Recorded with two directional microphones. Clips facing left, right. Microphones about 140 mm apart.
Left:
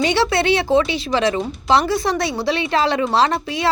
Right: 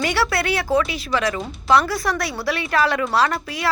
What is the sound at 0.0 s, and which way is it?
Speech, 25° left (ahead or behind).